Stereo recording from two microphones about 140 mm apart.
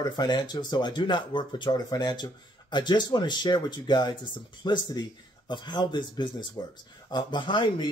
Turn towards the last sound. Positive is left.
turn(degrees=35)  # may be behind; listen again after turning